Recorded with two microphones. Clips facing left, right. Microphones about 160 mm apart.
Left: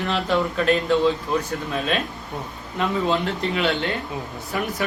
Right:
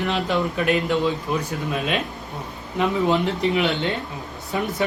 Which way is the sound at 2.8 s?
15° right (ahead or behind).